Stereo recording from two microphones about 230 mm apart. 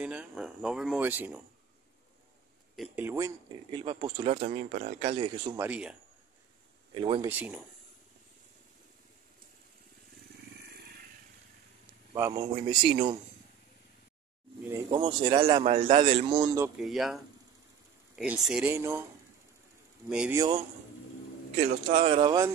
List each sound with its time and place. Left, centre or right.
0.0 s speech: centre
2.7 s speech: centre
5.7 s speech: centre
6.9 s speech: right
7.2 s speech: centre
12.1 s speech: centre
14.6 s speech: centre
16.6 s speech: centre
20.1 s speech: centre
20.3 s speech: centre
21.9 s speech: right